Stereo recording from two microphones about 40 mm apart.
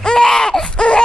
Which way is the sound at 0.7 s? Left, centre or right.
Left.